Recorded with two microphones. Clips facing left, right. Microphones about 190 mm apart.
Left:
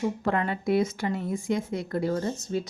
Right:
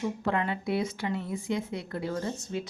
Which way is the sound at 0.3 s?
45° left (ahead or behind).